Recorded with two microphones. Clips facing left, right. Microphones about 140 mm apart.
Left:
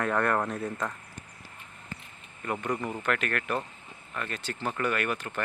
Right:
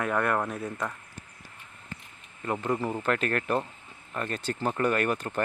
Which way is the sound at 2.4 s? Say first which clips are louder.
Right 2 dB; 25° right (ahead or behind).